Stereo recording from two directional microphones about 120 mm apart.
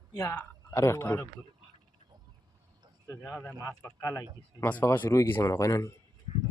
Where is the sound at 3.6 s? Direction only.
20° left (ahead or behind).